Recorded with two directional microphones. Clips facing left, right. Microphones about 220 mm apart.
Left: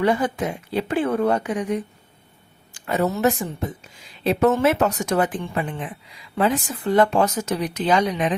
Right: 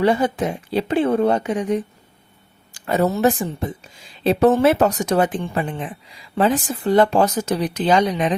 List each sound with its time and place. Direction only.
0.0 s speech: 25° right (ahead or behind)